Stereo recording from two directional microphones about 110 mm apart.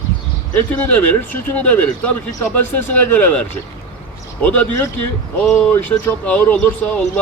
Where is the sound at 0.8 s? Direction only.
15° left (ahead or behind).